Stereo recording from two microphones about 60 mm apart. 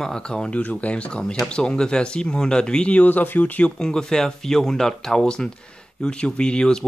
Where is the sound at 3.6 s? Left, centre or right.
Centre.